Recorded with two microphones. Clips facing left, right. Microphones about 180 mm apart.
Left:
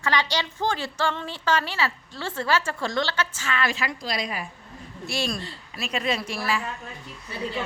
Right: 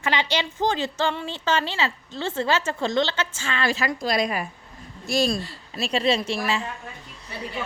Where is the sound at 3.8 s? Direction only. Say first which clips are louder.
Right 6 dB; 50° right (ahead or behind).